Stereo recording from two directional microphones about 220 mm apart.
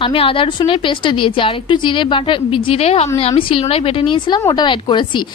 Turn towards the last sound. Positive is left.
turn(degrees=20)  # may be behind; listen again after turning